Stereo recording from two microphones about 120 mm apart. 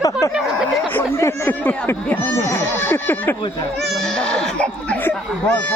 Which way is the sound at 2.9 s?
20° left (ahead or behind).